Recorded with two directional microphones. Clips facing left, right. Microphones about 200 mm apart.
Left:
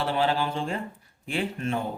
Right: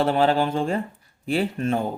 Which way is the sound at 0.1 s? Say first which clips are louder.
Right 5 dB; 45° right (ahead or behind).